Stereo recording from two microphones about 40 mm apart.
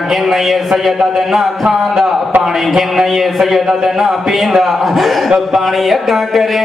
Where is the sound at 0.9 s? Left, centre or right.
Centre.